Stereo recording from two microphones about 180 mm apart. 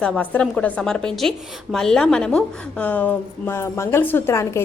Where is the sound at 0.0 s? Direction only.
5° left (ahead or behind).